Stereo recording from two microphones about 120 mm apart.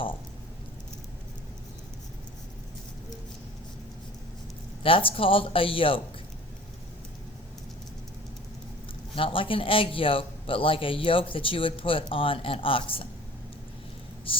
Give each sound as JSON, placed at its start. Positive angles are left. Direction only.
{"t": 4.8, "sound": "a man's voice", "side_deg": 50}
{"t": 9.1, "sound": "a man's voice", "side_deg": 45}
{"t": 14.3, "sound": "a sound", "side_deg": 50}